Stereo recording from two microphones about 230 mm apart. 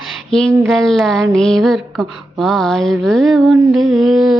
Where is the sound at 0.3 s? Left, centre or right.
Centre.